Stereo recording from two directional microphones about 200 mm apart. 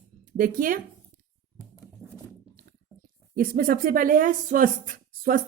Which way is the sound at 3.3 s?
45° right (ahead or behind).